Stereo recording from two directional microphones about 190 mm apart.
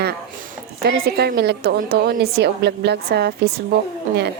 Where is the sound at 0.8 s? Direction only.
55° right (ahead or behind).